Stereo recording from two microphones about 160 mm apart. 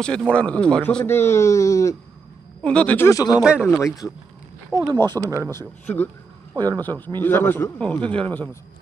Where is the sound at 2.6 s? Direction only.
5° left (ahead or behind).